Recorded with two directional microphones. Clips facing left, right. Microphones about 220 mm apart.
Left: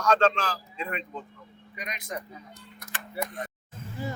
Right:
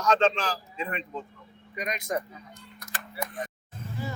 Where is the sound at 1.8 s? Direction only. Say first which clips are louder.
Right 6 dB; 45° right (ahead or behind).